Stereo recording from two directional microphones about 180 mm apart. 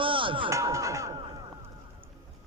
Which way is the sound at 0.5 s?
15° right (ahead or behind).